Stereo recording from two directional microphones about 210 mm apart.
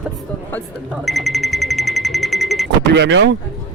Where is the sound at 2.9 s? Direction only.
55° right (ahead or behind).